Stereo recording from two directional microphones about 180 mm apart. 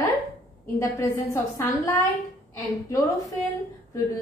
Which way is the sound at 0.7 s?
15° left (ahead or behind).